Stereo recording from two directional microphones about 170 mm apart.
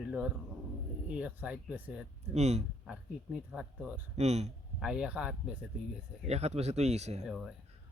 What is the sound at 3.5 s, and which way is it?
Speech, 5° right (ahead or behind).